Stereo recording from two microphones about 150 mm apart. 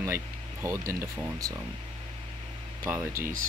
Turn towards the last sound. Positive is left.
turn(degrees=-15)  # may be behind; listen again after turning